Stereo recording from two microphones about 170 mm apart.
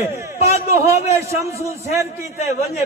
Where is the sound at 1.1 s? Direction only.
15° right (ahead or behind).